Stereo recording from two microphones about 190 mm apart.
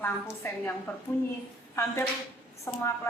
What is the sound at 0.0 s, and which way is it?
A woman's voice, 10° left (ahead or behind).